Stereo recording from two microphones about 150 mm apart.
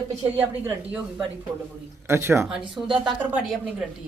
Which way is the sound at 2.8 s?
5° right (ahead or behind).